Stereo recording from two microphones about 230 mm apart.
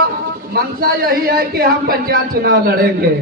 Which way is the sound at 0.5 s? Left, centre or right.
Right.